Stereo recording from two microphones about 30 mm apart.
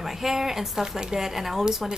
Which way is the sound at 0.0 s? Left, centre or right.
Centre.